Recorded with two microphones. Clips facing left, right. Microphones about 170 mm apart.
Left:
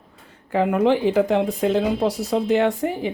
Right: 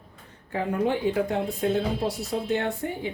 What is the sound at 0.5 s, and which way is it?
Speech, 85° left.